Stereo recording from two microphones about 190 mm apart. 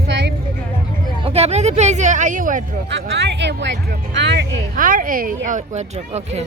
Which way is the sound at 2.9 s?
60° right (ahead or behind).